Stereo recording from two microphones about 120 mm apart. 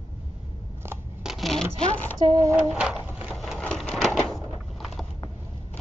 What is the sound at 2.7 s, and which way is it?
Speech, 5° right (ahead or behind).